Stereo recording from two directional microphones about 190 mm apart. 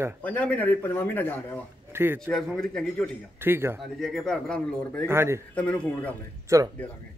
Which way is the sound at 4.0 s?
Centre (ahead or behind).